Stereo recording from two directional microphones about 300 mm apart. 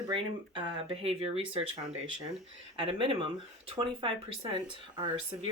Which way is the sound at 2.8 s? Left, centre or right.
Centre.